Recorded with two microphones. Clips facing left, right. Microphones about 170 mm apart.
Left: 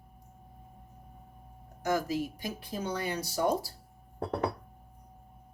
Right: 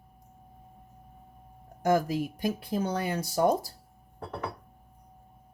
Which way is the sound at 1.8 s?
50° right (ahead or behind).